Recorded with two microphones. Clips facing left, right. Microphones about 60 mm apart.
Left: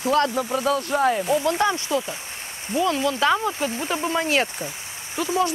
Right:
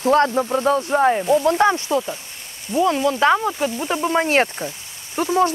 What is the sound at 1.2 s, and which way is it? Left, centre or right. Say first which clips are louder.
Speech: right 5 dB; centre.